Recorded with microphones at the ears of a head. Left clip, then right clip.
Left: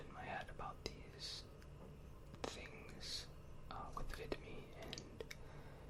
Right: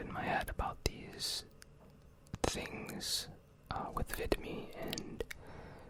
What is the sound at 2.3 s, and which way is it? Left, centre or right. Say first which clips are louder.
Speech: right 12 dB; right.